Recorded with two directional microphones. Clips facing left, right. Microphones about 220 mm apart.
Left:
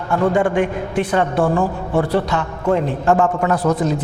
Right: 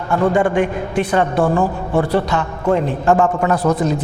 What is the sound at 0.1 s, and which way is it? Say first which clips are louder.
A man's voice: right 1 dB; 20° right (ahead or behind).